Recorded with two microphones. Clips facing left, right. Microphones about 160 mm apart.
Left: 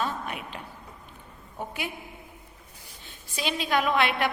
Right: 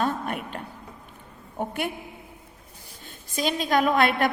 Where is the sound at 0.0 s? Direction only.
50° right (ahead or behind).